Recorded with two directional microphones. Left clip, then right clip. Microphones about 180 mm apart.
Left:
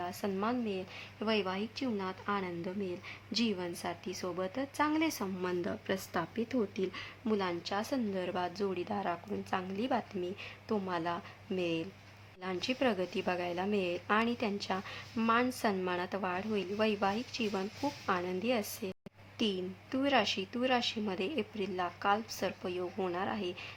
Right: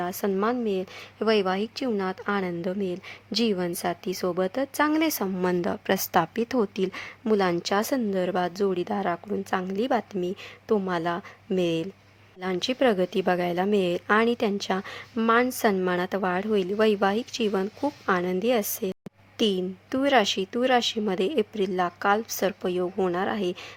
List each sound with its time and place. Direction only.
0.0 s a woman's voice: 40° right (ahead or behind)